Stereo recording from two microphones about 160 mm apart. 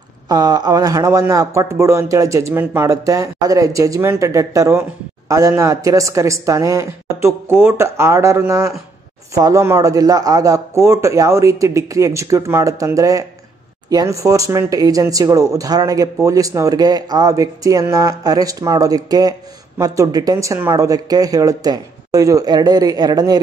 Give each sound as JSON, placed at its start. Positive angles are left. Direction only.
{"t": 0.3, "sound": "speech", "side_deg": -25}